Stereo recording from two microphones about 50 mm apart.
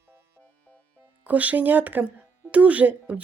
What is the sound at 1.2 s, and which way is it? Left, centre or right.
Speech, right.